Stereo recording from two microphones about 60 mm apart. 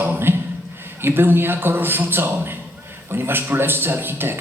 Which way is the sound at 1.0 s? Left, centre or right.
Right.